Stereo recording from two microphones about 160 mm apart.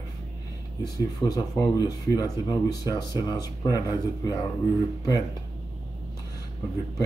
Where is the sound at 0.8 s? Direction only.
25° left (ahead or behind).